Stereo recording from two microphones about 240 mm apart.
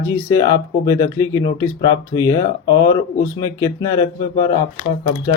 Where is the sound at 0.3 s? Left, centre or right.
Centre.